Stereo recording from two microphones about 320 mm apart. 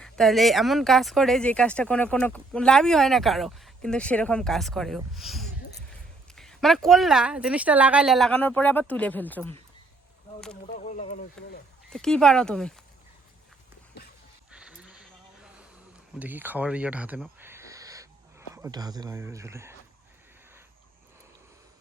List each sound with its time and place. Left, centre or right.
0.0 s speech: centre
10.8 s speech: left
11.4 s speech: centre
14.5 s a sound: centre
16.1 s speech: centre